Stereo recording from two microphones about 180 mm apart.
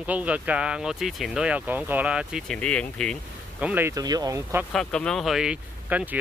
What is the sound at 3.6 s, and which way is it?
Speech, 10° right (ahead or behind).